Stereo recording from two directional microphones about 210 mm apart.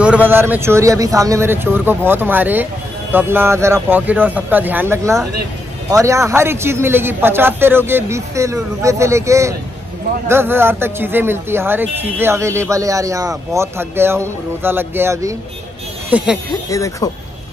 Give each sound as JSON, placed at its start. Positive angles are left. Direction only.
{"t": 0.0, "sound": "a man's voice", "side_deg": -5}
{"t": 16.6, "sound": "speech", "side_deg": 15}